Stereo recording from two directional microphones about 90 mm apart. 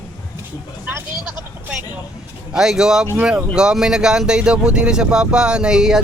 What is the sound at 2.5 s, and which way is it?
Speech, 5° right (ahead or behind).